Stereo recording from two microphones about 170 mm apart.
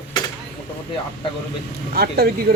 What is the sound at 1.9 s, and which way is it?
Speech, 65° right (ahead or behind).